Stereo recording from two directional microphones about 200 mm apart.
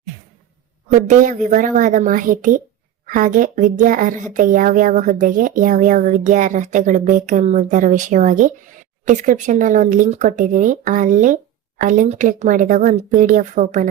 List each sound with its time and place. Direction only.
0.9 s speech: 35° right (ahead or behind)